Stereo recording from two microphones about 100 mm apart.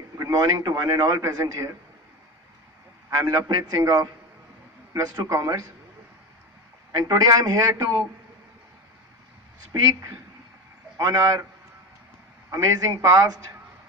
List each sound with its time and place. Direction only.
0.2 s a man's voice: 35° right (ahead or behind)
1.2 s a man's voice: 35° right (ahead or behind)
3.3 s a man's voice: 40° right (ahead or behind)
7.0 s a man's voice: 40° right (ahead or behind)
11.0 s a man's voice: 35° right (ahead or behind)
12.4 s a man's voice: 35° right (ahead or behind)